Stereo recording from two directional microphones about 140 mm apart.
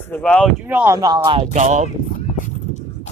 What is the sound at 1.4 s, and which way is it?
Speech, 55° right (ahead or behind).